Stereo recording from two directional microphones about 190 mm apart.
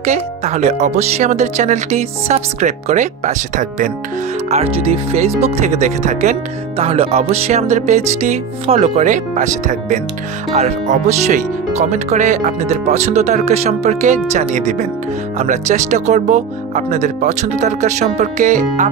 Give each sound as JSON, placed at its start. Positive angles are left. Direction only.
{"t": 0.0, "sound": "speech", "side_deg": -35}